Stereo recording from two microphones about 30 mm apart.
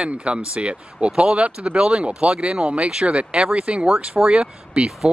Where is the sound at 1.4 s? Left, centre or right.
Right.